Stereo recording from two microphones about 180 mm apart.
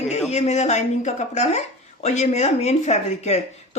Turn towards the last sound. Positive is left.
turn(degrees=40)  # may be behind; listen again after turning